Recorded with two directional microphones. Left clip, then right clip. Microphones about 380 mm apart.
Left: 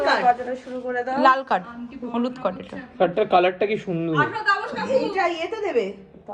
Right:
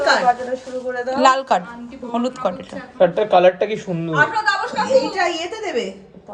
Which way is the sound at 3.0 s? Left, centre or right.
Centre.